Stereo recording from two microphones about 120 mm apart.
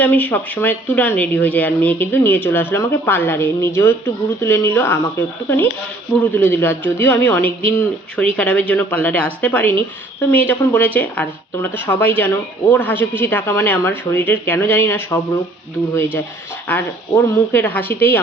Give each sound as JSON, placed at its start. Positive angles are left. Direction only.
{"t": 0.0, "sound": "a man's voice", "side_deg": 15}
{"t": 6.3, "sound": "a man's voice", "side_deg": 15}
{"t": 16.6, "sound": "a man's voice", "side_deg": 20}